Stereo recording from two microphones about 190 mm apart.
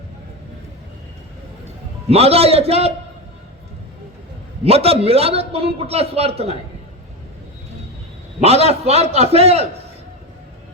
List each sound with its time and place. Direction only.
2.0 s a man's voice: 30° right (ahead or behind)
4.6 s a man's voice: 30° right (ahead or behind)
8.4 s a man's voice: 35° right (ahead or behind)